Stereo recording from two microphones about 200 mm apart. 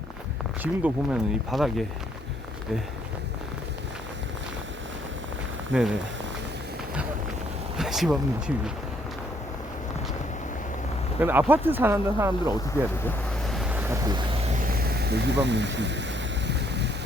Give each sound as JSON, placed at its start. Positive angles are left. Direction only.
{"t": 0.6, "sound": "speech", "side_deg": -5}
{"t": 5.7, "sound": "speech", "side_deg": -5}
{"t": 7.8, "sound": "speech", "side_deg": 0}
{"t": 11.2, "sound": "speech", "side_deg": -10}
{"t": 13.1, "sound": "vehicle", "side_deg": 0}
{"t": 14.8, "sound": "speech", "side_deg": -55}
{"t": 16.5, "sound": "vehicle", "side_deg": -60}